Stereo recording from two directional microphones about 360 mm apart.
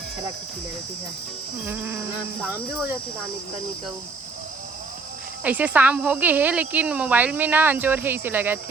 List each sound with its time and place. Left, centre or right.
1.6 s speech: centre
5.4 s speech: centre